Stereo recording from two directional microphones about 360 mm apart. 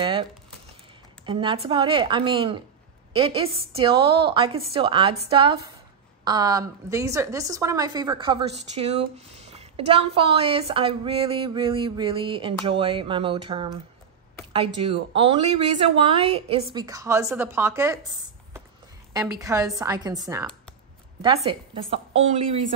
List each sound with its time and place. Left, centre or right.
0.0 s a sound: centre
1.2 s a woman's voice: centre
14.8 s a woman's voice: centre
19.1 s a woman's voice: centre